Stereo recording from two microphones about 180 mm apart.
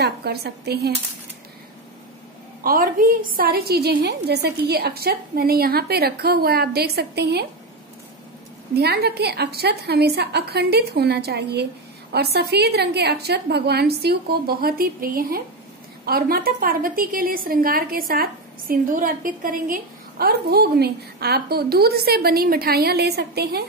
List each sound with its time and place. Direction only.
0.0 s a woman's voice: 65° right (ahead or behind)
2.6 s a woman's voice: 50° right (ahead or behind)
8.7 s a woman's voice: 60° right (ahead or behind)